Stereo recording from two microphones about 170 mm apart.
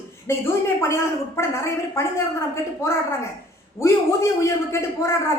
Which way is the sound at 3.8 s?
15° left (ahead or behind).